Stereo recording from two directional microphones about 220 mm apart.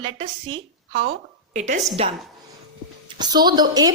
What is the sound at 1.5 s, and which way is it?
Speech, 35° right (ahead or behind).